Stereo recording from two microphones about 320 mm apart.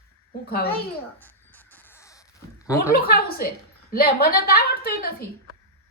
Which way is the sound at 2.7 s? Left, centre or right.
Centre.